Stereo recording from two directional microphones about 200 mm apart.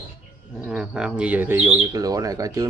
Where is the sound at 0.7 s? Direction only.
5° right (ahead or behind).